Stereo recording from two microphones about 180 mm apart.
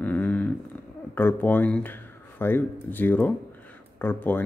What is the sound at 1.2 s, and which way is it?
Speech, 10° left (ahead or behind).